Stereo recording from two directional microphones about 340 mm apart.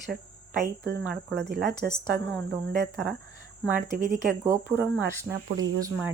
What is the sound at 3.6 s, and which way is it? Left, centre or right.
Speech, centre.